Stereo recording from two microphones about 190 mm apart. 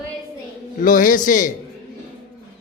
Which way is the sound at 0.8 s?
45° left (ahead or behind).